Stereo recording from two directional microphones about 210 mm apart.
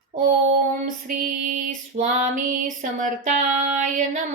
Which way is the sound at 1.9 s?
40° right (ahead or behind).